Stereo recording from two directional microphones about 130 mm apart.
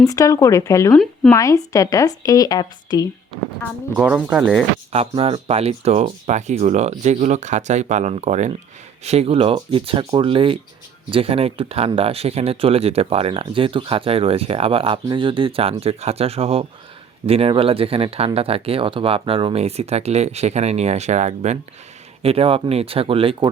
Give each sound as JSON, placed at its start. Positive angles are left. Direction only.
{"t": 0.0, "sound": "speech", "side_deg": 25}
{"t": 3.9, "sound": "speech", "side_deg": -10}
{"t": 4.9, "sound": "speech", "side_deg": -50}
{"t": 22.2, "sound": "speech", "side_deg": -50}